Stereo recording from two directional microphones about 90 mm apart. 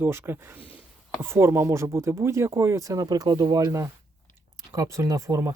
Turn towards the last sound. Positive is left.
turn(degrees=-35)  # may be behind; listen again after turning